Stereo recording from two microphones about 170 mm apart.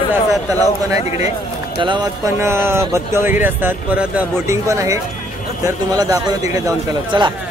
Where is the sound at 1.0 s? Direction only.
40° left (ahead or behind).